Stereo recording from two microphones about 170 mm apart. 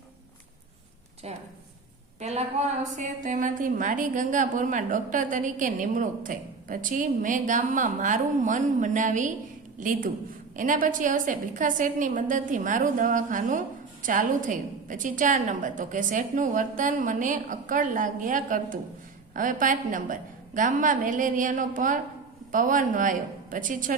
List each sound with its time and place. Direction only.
1.2 s a woman's voice: 40° right (ahead or behind)
10.6 s a woman's voice: 50° right (ahead or behind)